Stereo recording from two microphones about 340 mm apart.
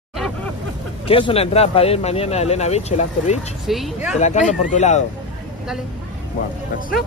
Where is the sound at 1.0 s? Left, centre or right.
Centre.